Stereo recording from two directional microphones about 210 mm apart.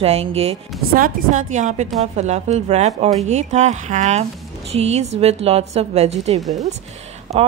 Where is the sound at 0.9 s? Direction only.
40° right (ahead or behind).